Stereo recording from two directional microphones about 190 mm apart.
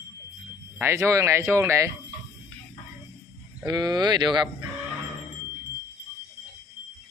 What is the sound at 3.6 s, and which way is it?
Speech, 20° right (ahead or behind).